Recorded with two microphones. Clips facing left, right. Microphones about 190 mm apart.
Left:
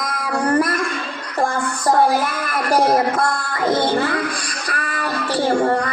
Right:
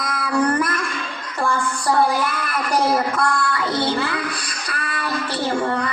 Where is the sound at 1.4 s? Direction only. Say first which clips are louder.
Left 1 dB; 40° left (ahead or behind).